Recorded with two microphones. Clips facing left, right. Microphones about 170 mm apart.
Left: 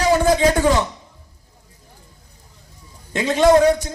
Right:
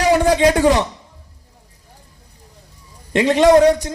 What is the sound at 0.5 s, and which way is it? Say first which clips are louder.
Speech: right 3 dB; 35° right (ahead or behind).